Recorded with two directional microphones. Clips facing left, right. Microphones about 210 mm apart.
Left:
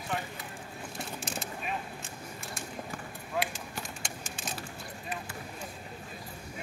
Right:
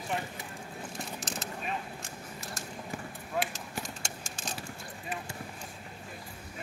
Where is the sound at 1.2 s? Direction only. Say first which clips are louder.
Even; 10° left (ahead or behind).